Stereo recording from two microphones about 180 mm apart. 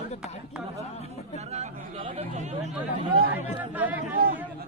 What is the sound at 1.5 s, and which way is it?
Chatter, 35° right (ahead or behind).